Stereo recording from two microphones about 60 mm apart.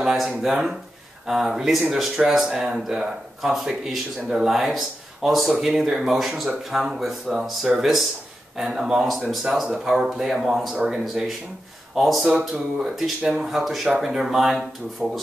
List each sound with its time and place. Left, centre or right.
0.0 s a sound: centre
0.4 s speech: centre
11.9 s speech: centre
13.4 s speech: centre